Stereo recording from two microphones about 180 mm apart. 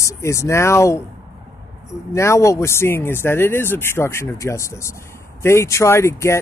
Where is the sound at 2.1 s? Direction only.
15° left (ahead or behind).